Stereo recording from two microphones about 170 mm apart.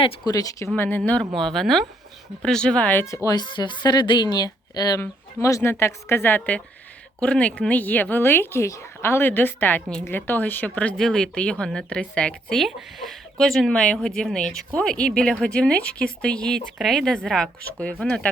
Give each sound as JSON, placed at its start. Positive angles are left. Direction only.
{"t": 0.0, "sound": "a woman's voice", "side_deg": 20}
{"t": 0.8, "sound": "speech", "side_deg": 10}
{"t": 3.2, "sound": "a woman's voice", "side_deg": 25}